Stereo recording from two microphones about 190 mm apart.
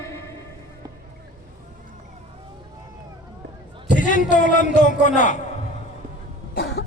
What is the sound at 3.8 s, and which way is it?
A man's voice, 45° left (ahead or behind).